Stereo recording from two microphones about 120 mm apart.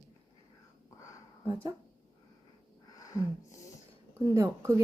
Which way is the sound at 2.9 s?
30° left (ahead or behind).